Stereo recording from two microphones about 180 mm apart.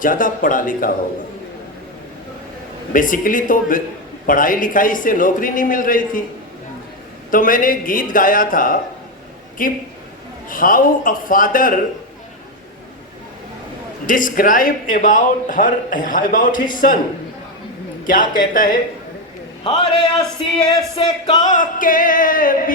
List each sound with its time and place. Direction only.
0.0 s a man's voice: 50° left (ahead or behind)
2.9 s a man's voice: 50° left (ahead or behind)
7.3 s a man's voice: 50° left (ahead or behind)
14.1 s a man's voice: 50° left (ahead or behind)
18.0 s a man's voice: 50° left (ahead or behind)
19.6 s music: 25° left (ahead or behind)
21.4 s a man's voice: 45° left (ahead or behind)